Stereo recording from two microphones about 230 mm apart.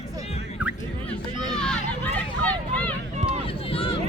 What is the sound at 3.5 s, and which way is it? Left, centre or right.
Run, left.